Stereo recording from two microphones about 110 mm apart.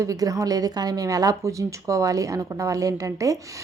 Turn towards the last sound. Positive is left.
turn(degrees=-30)  # may be behind; listen again after turning